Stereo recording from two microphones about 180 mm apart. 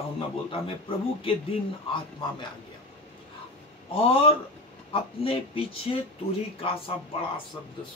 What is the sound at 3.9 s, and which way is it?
Speech, 30° left (ahead or behind).